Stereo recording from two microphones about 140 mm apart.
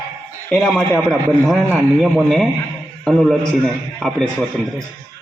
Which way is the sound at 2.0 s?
Centre (ahead or behind).